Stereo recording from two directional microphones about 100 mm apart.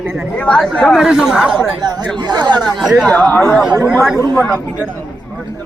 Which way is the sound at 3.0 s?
15° left (ahead or behind).